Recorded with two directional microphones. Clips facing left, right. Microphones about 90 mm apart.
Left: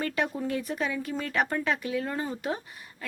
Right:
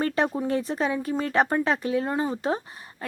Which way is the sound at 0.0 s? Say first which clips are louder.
Right 5 dB; 35° right (ahead or behind).